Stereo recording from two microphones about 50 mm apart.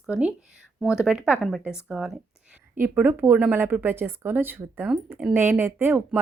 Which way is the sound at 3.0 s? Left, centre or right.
Right.